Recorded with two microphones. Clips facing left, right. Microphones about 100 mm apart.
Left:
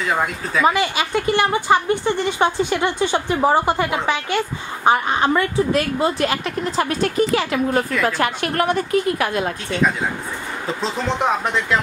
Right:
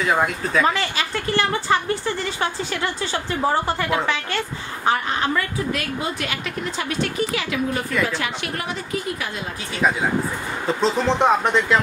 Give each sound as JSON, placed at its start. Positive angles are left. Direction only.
{"t": 0.0, "sound": "speech", "side_deg": 0}
{"t": 0.7, "sound": "a woman's voice", "side_deg": 15}
{"t": 9.7, "sound": "speech", "side_deg": -5}